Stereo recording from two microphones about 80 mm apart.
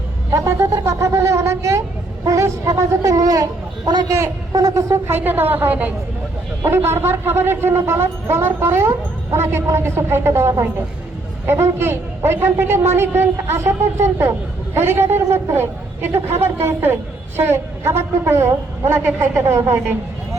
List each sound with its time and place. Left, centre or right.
0.3 s a man's voice: right